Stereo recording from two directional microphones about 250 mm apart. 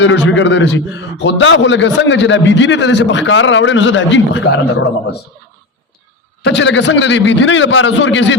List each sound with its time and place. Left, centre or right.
0.0 s a man's voice: left
6.4 s a man's voice: left